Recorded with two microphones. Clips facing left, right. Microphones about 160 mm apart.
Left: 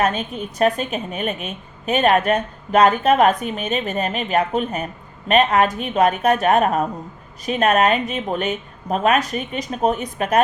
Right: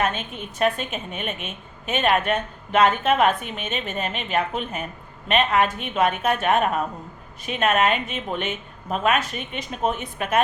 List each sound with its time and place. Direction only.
0.0 s a woman's voice: 40° left (ahead or behind)